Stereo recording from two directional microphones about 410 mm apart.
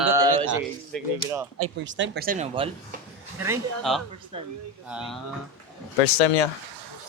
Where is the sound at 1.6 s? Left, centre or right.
Right.